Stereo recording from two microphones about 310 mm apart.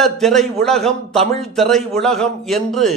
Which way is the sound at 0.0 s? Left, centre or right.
Centre.